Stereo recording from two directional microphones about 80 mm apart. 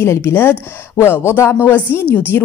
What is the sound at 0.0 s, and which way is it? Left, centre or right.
A woman's voice, left.